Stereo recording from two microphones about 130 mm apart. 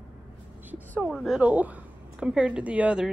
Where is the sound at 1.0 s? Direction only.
Centre (ahead or behind).